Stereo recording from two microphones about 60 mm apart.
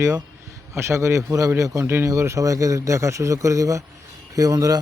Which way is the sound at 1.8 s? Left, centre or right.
Right.